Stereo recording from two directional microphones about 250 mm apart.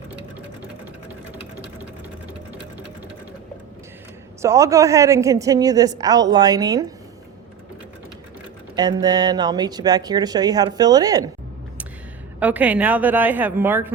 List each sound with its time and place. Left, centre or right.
4.4 s speech: centre
8.7 s speech: centre
12.4 s speech: centre